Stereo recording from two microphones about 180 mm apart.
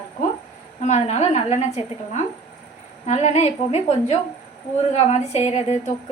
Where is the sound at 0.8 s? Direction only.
40° left (ahead or behind).